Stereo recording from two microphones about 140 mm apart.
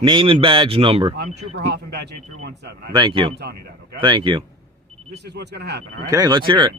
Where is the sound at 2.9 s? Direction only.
35° right (ahead or behind).